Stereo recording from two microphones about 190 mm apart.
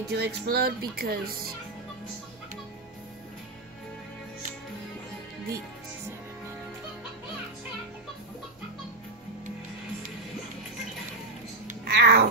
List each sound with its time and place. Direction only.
0.1 s speech: 60° right (ahead or behind)
11.8 s cat: 55° right (ahead or behind)